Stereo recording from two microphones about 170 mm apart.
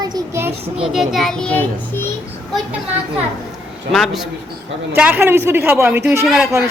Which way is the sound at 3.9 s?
Centre (ahead or behind).